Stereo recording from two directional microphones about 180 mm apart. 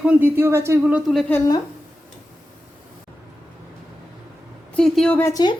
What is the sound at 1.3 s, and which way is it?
Speech, 20° left (ahead or behind).